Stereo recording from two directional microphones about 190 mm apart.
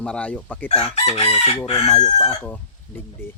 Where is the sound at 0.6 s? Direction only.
35° left (ahead or behind).